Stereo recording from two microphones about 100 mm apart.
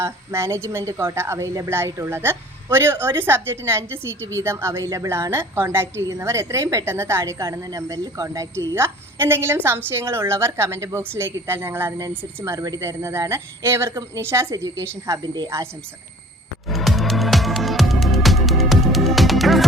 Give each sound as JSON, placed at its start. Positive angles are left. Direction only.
{"t": 0.0, "sound": "speech", "side_deg": -25}
{"t": 16.6, "sound": "music", "side_deg": 0}